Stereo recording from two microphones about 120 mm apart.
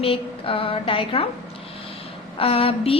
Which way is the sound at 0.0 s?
50° left (ahead or behind).